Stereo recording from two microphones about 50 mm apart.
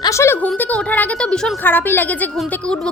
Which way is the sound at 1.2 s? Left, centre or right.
Centre.